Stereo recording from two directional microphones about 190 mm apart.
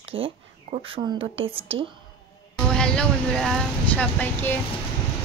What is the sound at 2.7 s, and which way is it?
Speech, 5° left (ahead or behind).